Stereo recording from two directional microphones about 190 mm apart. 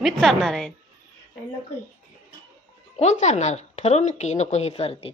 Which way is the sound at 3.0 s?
35° left (ahead or behind).